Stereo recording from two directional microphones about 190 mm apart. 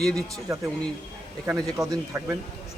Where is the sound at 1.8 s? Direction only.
20° right (ahead or behind).